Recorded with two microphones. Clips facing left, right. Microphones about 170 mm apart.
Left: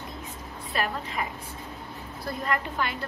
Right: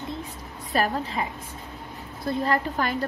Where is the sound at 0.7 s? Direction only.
40° right (ahead or behind).